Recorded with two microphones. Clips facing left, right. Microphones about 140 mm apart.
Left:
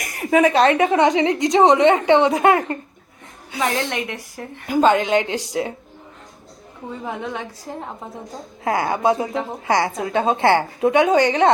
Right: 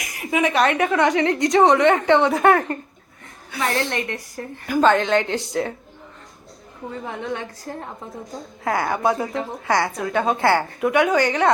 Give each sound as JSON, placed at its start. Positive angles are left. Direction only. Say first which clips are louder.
{"t": 0.0, "sound": "a sound", "louder": "left 5 dB", "side_deg": 50}
{"t": 0.5, "sound": "a woman's voice", "louder": "left 3 dB", "side_deg": 25}
{"t": 3.9, "sound": "speech", "louder": "even", "side_deg": 5}
{"t": 4.6, "sound": "a woman's voice", "louder": "left 1 dB", "side_deg": 20}
{"t": 8.6, "sound": "a woman's voice", "louder": "left 2 dB", "side_deg": 20}